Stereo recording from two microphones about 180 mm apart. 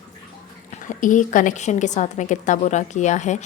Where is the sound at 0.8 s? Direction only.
45° left (ahead or behind).